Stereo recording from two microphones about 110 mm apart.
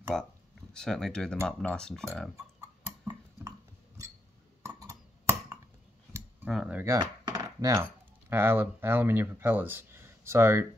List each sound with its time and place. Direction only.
0.1 s speech: 5° left (ahead or behind)
4.6 s a sound: 25° right (ahead or behind)
6.5 s speech: 10° right (ahead or behind)
7.0 s chopping: 40° right (ahead or behind)
7.8 s speech: 20° right (ahead or behind)